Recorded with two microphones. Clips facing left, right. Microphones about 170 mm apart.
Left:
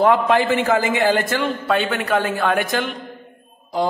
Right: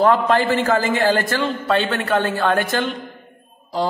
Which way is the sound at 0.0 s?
15° left (ahead or behind).